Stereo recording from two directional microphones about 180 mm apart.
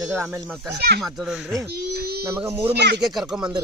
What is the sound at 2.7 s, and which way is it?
Speech, 70° right (ahead or behind).